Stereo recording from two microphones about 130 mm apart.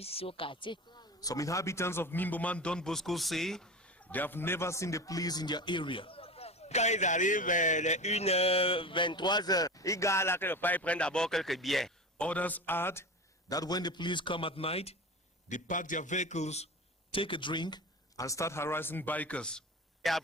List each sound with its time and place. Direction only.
0.0 s speech: 50° left (ahead or behind); by 13.0 s 15° left (ahead or behind)
13.5 s a man's voice: 30° left (ahead or behind); by 15.0 s 50° left (ahead or behind)
15.4 s a man's voice: 75° left (ahead or behind); by 20.2 s 5° left (ahead or behind)